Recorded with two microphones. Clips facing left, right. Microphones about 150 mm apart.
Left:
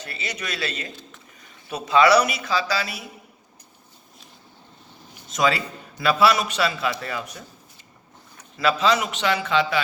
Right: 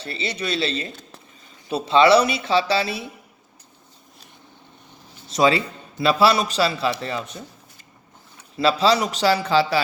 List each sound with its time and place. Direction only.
0.0 s speech: 30° right (ahead or behind)
5.3 s a man's voice: 30° right (ahead or behind)
8.5 s a man's voice: 30° right (ahead or behind)